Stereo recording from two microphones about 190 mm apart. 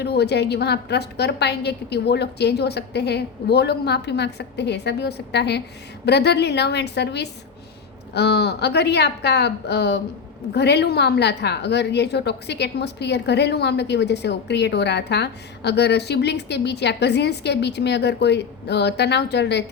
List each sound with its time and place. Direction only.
0.0 s a woman's voice: 60° left (ahead or behind)